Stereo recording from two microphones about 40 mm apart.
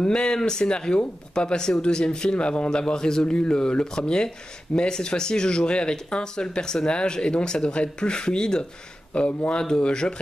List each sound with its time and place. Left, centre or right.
0.0 s speech: left